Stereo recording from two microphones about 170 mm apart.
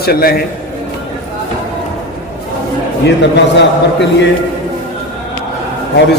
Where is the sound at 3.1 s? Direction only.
90° left.